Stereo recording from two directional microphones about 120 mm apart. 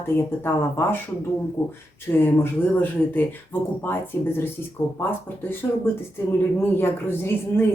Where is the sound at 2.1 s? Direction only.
15° left (ahead or behind).